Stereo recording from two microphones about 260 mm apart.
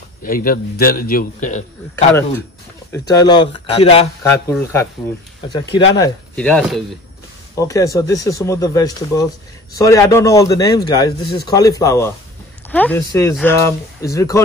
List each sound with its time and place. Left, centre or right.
0.2 s a man's voice: left
2.9 s speech: centre
4.2 s speech: centre
6.3 s speech: centre